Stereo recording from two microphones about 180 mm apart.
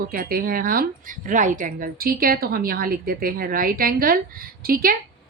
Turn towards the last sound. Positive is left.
turn(degrees=-55)  # may be behind; listen again after turning